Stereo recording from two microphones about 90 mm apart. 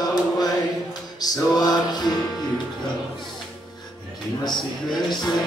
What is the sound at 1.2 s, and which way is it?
Music, 45° left (ahead or behind).